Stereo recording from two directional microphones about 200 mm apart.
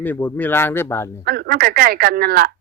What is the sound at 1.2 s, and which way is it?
Speech, 50° right (ahead or behind).